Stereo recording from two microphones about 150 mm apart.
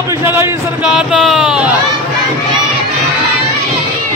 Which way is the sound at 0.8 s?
5° right (ahead or behind).